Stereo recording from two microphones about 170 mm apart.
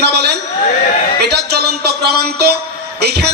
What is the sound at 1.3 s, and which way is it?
Music, 70° right (ahead or behind).